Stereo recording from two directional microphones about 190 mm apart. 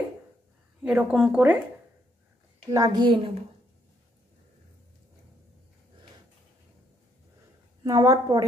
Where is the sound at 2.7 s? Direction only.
20° right (ahead or behind).